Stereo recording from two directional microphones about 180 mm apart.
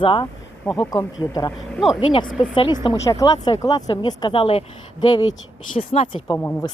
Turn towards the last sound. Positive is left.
turn(degrees=10)  # may be behind; listen again after turning